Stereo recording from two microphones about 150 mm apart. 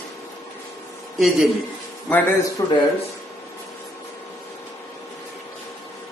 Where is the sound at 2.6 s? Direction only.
20° left (ahead or behind).